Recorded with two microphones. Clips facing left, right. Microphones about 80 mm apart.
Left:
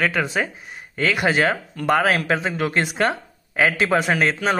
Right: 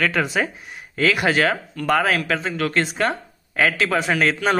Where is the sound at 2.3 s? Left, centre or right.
Centre.